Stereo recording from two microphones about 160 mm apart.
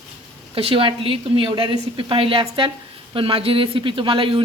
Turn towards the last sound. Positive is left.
turn(degrees=-35)  # may be behind; listen again after turning